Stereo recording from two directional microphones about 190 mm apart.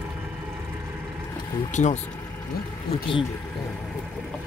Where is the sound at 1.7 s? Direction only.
40° left (ahead or behind).